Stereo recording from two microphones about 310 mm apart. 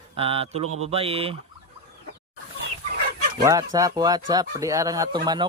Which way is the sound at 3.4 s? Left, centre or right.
Centre.